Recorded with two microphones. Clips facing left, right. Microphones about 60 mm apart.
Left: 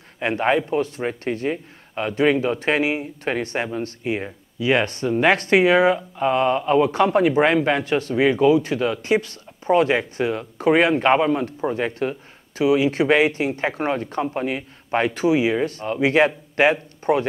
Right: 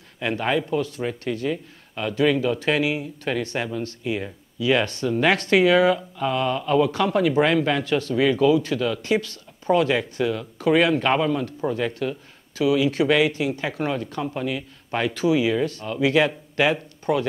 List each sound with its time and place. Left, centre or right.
0.2 s speech: left